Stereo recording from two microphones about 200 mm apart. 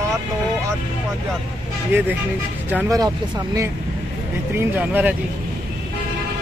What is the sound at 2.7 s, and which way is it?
Speech, 15° right (ahead or behind).